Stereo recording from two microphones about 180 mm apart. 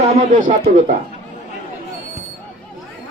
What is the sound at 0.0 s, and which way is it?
Speech, 40° right (ahead or behind).